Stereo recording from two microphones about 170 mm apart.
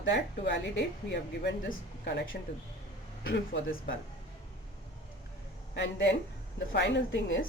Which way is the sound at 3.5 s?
90° left.